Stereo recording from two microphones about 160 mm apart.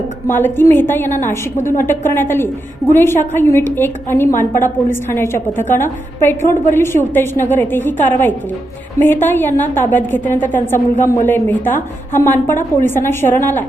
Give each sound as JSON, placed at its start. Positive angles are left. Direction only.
{"t": 0.3, "sound": "a woman's voice", "side_deg": 15}
{"t": 4.3, "sound": "a woman's voice", "side_deg": 55}
{"t": 4.6, "sound": "a woman's voice", "side_deg": 15}